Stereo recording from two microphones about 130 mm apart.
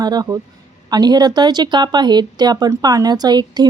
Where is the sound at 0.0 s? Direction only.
30° right (ahead or behind).